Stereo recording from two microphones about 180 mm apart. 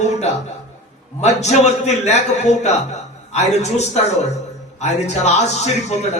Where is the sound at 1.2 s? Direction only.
40° left (ahead or behind).